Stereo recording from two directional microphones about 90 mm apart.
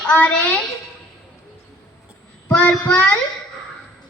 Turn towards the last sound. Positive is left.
turn(degrees=15)  # may be behind; listen again after turning